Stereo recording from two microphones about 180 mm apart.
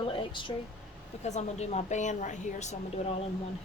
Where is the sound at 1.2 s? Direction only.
40° left (ahead or behind).